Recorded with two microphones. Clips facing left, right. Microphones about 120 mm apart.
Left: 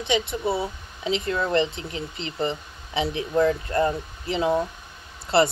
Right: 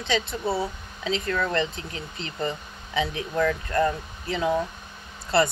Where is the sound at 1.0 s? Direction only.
20° left (ahead or behind).